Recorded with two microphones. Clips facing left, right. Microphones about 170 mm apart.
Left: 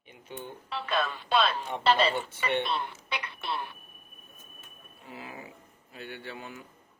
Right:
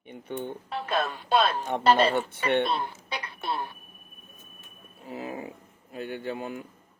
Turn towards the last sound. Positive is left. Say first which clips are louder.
# right 8 dB
turn(degrees=-45)  # may be behind; listen again after turning